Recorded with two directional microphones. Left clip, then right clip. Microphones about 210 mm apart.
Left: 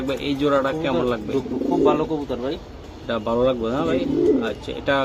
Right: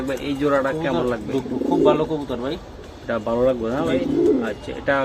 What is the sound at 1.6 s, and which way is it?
Speech, 35° right (ahead or behind).